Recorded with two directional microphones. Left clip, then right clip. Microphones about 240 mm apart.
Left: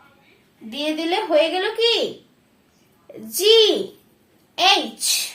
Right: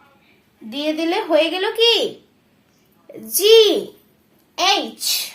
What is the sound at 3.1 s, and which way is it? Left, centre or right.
Speech, right.